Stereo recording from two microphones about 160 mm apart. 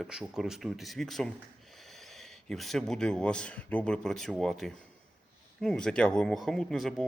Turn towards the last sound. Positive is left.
turn(degrees=0)  # may be behind; listen again after turning